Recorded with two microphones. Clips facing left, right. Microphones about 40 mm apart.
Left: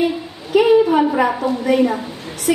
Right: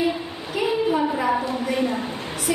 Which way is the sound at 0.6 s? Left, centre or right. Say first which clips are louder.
Left 9 dB; left.